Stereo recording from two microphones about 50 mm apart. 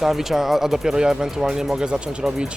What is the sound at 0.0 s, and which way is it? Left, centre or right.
Speech, centre.